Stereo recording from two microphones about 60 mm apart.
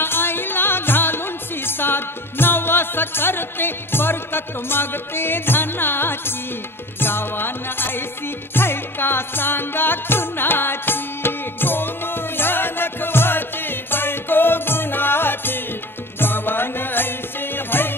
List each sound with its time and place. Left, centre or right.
0.0 s music: left